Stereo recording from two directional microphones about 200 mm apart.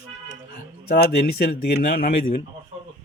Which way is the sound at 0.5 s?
50° left (ahead or behind).